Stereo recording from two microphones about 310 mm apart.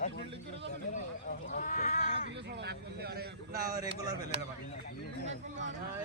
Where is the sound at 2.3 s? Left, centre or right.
Right.